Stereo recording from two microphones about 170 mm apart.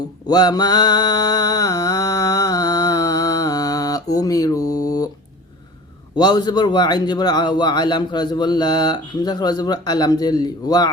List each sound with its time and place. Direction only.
0.3 s mantra: 25° left (ahead or behind)
6.1 s a man's voice: 25° left (ahead or behind)